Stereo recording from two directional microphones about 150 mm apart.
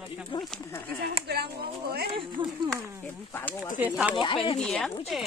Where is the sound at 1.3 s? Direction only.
90° right.